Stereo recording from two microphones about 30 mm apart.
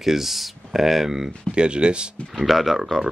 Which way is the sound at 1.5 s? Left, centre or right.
Right.